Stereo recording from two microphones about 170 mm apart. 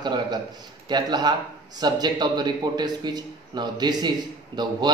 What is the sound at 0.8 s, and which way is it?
A man's voice, 25° right (ahead or behind).